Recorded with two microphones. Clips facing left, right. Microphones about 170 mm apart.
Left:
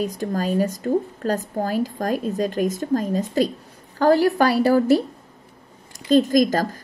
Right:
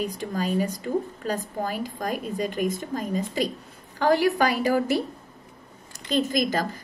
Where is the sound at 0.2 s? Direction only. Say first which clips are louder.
Left 4 dB; 40° left (ahead or behind).